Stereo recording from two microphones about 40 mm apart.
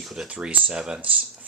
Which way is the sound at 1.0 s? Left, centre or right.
Right.